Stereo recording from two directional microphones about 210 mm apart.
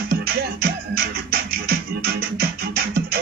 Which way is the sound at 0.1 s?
45° right (ahead or behind).